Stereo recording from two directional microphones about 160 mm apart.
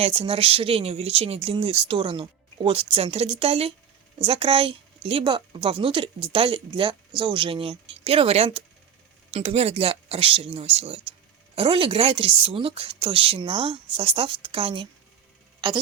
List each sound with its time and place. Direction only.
0.0 s a woman's voice: 35° right (ahead or behind)